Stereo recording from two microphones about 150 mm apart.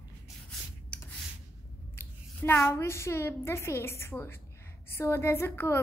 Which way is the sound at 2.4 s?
15° left (ahead or behind).